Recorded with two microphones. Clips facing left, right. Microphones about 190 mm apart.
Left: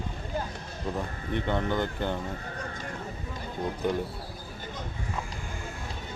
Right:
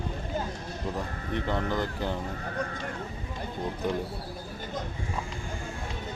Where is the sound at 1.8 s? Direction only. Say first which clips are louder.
Left 1 dB; centre (ahead or behind).